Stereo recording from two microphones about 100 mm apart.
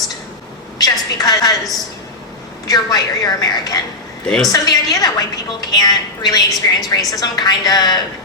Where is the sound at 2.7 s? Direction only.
40° left (ahead or behind).